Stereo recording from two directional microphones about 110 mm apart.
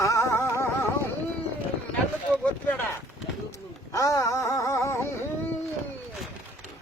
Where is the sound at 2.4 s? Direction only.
15° left (ahead or behind).